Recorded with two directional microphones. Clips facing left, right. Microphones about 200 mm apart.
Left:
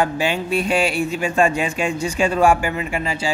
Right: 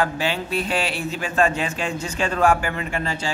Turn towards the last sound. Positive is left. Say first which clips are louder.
# left 3 dB
turn(degrees=10)  # may be behind; listen again after turning